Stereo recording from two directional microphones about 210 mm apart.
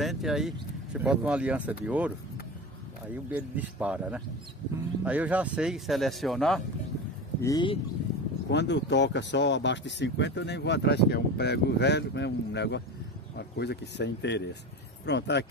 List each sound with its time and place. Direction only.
0.0 s speech: centre (ahead or behind)
3.3 s speech: 10° right (ahead or behind)
7.4 s speech: 20° left (ahead or behind)
8.5 s speech: 55° left (ahead or behind)